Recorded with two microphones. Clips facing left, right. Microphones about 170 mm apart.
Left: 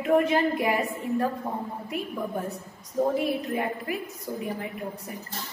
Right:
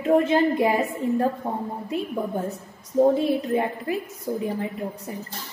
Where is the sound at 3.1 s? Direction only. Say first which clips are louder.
Right 5 dB; 30° right (ahead or behind).